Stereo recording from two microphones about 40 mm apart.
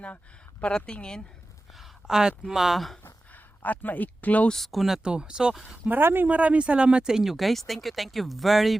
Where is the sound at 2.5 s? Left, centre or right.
Centre.